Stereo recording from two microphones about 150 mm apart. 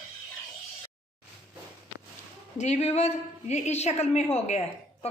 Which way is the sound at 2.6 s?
50° left (ahead or behind).